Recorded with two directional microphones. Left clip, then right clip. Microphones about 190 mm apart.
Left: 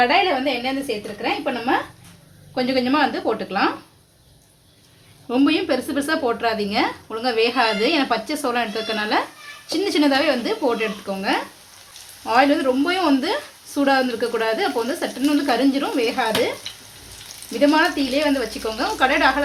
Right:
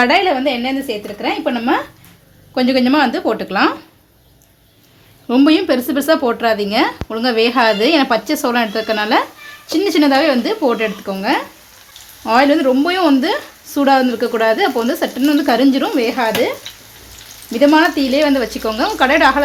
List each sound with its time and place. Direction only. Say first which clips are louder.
0.0 s speech: right 4 dB; 55° right (ahead or behind)
5.3 s speech: right 7 dB; 45° right (ahead or behind)
17.5 s speech: right 6 dB; 40° right (ahead or behind)